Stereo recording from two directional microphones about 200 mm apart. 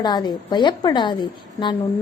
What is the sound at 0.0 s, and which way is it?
A woman's voice, 20° left (ahead or behind).